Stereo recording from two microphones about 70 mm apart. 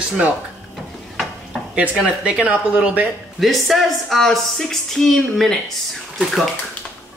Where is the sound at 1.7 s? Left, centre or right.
Centre.